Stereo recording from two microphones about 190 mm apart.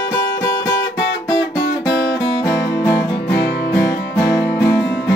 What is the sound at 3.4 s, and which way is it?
Music, 60° left (ahead or behind).